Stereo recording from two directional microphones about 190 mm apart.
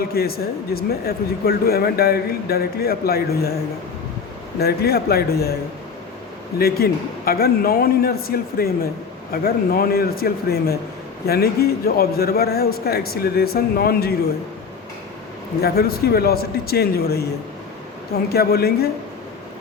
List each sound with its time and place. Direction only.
0.1 s speech: 55° left (ahead or behind)
4.6 s speech: 55° left (ahead or behind)
6.6 s a man's voice: 55° left (ahead or behind)
15.6 s speech: 55° left (ahead or behind)
18.3 s speech: 55° left (ahead or behind)